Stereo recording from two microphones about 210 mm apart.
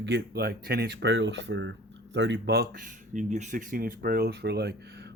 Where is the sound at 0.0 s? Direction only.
50° right (ahead or behind).